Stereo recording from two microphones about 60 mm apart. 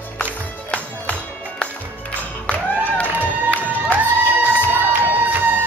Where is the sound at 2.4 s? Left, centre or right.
Left.